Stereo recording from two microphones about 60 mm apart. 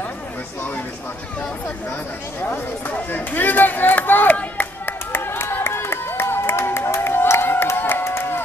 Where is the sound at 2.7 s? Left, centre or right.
Left.